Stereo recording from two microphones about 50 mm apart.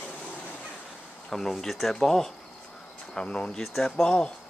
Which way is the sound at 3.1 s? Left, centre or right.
Centre.